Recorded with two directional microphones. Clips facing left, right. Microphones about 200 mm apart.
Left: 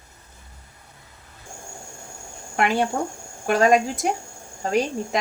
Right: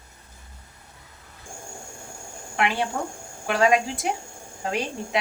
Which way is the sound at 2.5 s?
45° left (ahead or behind).